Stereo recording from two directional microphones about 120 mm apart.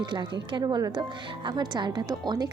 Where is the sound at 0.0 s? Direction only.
40° right (ahead or behind).